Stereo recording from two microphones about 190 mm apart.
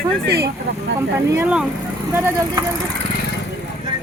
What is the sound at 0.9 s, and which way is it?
Speech, 15° right (ahead or behind).